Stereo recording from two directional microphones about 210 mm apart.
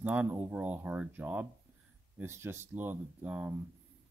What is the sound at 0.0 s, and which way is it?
Speech, 10° right (ahead or behind).